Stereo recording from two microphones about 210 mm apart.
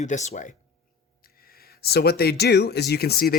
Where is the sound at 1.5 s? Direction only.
45° left (ahead or behind).